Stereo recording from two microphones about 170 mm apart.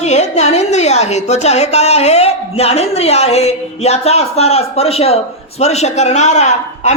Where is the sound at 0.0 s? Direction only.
40° left (ahead or behind).